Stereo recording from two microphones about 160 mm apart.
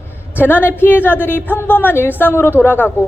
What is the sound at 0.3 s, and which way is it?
A woman's voice, 15° left (ahead or behind).